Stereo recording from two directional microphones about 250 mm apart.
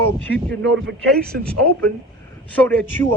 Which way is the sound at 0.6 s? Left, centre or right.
Right.